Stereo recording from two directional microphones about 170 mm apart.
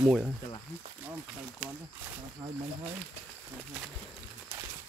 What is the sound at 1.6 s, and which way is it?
Speech, 5° right (ahead or behind).